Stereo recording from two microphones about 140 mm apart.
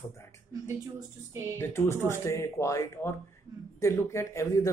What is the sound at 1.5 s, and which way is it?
A man's voice, 15° left (ahead or behind).